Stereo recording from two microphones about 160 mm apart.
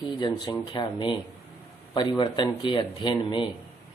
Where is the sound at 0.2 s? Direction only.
30° left (ahead or behind).